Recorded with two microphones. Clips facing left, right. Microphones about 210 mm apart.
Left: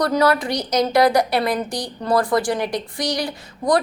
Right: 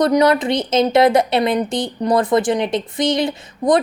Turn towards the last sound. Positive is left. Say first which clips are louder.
# right 3 dB
turn(degrees=-20)  # may be behind; listen again after turning